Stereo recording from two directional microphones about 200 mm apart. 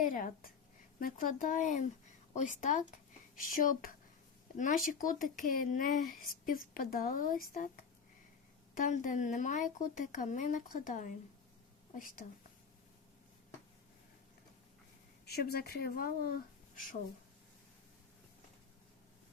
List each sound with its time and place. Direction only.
0.0 s a woman's voice: 45° left (ahead or behind)
15.3 s speech: 50° left (ahead or behind)